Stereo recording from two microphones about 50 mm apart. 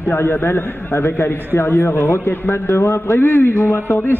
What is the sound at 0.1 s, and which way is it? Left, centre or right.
A man's voice, left.